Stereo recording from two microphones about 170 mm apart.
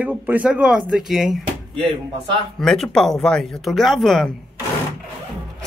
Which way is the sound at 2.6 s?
Centre (ahead or behind).